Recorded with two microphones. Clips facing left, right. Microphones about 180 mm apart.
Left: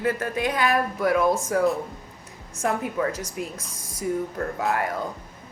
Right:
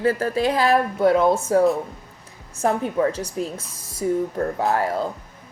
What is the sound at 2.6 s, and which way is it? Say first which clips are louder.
Speech: right 4 dB; 30° right (ahead or behind).